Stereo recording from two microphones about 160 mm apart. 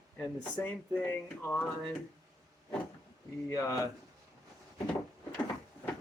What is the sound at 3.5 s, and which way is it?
Speech, 20° left (ahead or behind).